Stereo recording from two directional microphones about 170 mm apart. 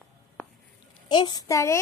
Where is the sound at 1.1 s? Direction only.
25° left (ahead or behind).